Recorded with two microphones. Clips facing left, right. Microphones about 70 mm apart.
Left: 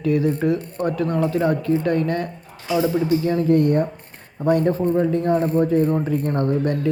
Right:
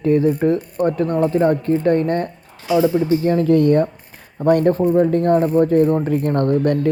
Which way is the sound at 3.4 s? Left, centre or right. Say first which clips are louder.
Right 3 dB; right.